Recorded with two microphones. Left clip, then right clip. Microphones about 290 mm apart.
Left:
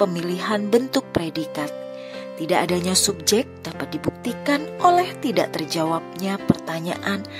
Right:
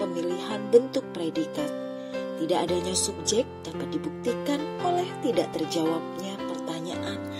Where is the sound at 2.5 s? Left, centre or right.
Left.